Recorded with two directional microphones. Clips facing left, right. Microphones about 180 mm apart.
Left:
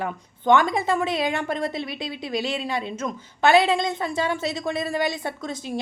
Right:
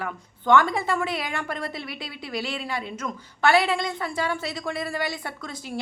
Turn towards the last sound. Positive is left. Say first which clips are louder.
# left 4 dB
turn(degrees=20)  # may be behind; listen again after turning